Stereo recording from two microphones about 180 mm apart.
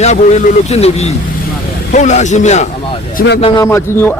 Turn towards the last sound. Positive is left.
turn(degrees=15)  # may be behind; listen again after turning